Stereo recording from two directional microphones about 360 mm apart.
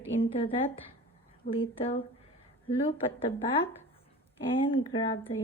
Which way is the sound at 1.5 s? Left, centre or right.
Centre.